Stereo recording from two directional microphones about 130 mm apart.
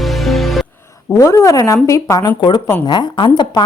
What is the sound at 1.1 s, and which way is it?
A woman's voice, 25° left (ahead or behind).